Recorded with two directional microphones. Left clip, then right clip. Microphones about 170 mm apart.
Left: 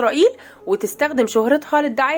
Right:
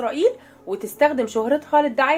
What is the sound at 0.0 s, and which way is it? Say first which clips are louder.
A woman's voice: left 5 dB; 45° left (ahead or behind).